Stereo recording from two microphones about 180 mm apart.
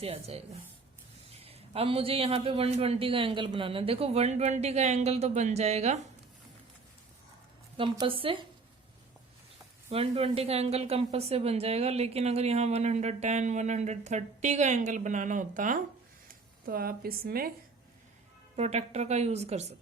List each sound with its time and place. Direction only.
0.0 s speech: 35° right (ahead or behind)
7.8 s speech: 30° right (ahead or behind)
9.9 s speech: 35° right (ahead or behind); by 17.5 s 55° right (ahead or behind)
18.5 s speech: 35° right (ahead or behind)